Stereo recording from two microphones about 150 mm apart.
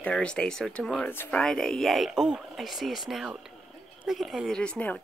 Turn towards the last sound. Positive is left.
turn(degrees=10)  # may be behind; listen again after turning